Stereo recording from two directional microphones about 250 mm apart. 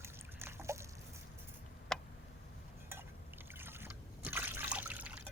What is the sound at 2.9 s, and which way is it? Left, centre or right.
Liquid, centre.